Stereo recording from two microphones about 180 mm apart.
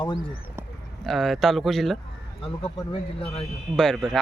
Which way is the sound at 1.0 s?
Centre (ahead or behind).